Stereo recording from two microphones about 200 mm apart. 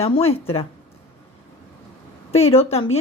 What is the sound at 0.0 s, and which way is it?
Speech, 30° left (ahead or behind).